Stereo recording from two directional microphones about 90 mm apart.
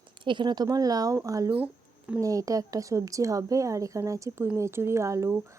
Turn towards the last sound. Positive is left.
turn(degrees=-35)  # may be behind; listen again after turning